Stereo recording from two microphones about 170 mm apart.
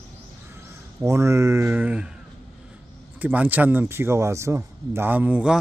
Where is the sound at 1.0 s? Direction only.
15° right (ahead or behind).